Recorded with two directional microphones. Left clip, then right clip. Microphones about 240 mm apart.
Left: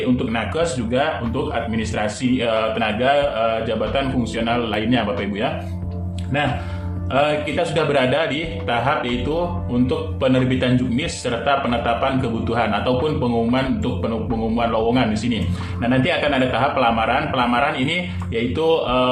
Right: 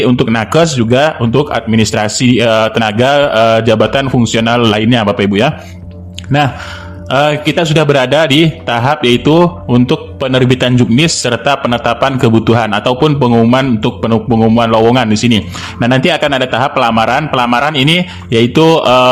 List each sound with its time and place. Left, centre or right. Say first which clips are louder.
0.3 s a man's voice: right 11 dB; right
7.1 s a man's voice: right 8 dB; right